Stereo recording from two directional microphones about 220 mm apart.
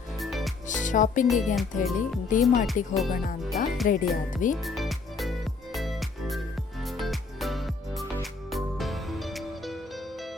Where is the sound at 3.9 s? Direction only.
35° left (ahead or behind).